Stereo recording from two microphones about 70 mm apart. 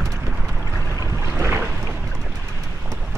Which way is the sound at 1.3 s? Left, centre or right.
Right.